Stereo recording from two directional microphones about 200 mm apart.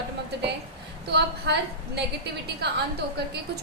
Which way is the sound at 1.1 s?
55° right (ahead or behind).